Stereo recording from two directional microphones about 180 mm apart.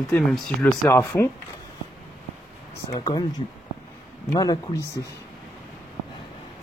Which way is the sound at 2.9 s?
20° left (ahead or behind).